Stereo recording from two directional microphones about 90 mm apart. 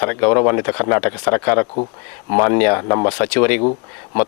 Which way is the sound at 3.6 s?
35° left (ahead or behind).